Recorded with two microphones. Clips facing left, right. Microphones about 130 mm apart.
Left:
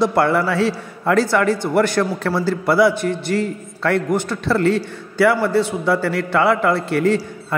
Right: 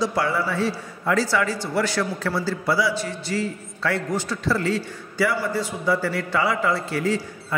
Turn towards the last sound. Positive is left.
turn(degrees=65)  # may be behind; listen again after turning